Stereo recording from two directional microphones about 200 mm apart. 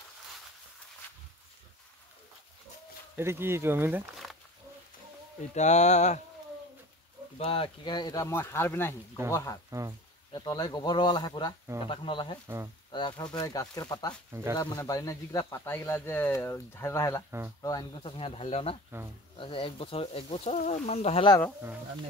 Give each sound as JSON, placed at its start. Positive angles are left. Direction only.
{"t": 3.2, "sound": "speech", "side_deg": -10}
{"t": 5.4, "sound": "speech", "side_deg": 35}
{"t": 7.3, "sound": "speech", "side_deg": 30}
{"t": 9.7, "sound": "speech", "side_deg": -15}
{"t": 10.3, "sound": "speech", "side_deg": 20}